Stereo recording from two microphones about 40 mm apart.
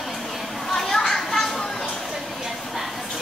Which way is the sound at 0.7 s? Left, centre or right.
Centre.